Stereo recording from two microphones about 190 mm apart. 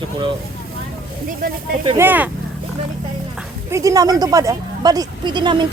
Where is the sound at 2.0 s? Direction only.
10° right (ahead or behind).